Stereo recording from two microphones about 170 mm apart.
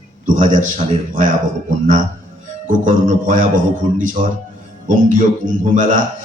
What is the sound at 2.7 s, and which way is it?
A man's voice, 50° right (ahead or behind).